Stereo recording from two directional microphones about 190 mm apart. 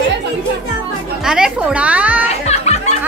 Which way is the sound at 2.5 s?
35° left (ahead or behind).